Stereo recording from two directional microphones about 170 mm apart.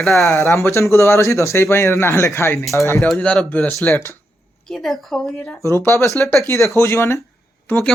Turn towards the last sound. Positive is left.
turn(degrees=10)  # may be behind; listen again after turning